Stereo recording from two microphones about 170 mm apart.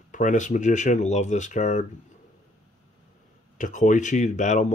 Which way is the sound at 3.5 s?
45° left (ahead or behind).